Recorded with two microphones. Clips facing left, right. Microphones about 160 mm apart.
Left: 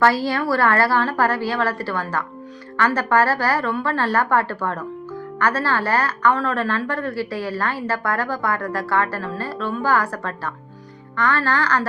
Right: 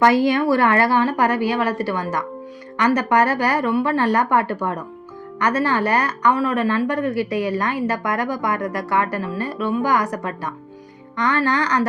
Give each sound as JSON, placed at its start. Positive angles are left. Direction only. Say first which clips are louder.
{"t": 0.0, "sound": "a woman's voice", "louder": "right 3 dB", "side_deg": -20}